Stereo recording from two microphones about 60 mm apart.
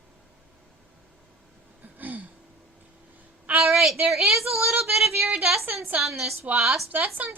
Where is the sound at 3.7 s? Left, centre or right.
Centre.